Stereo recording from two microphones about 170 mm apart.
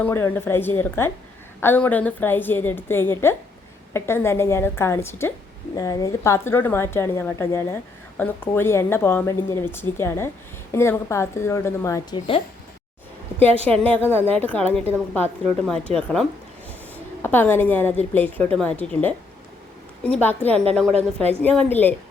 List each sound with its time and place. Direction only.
0.0 s a woman's voice: 15° left (ahead or behind)
13.7 s a woman's voice: 10° left (ahead or behind)
17.2 s a woman's voice: 10° left (ahead or behind)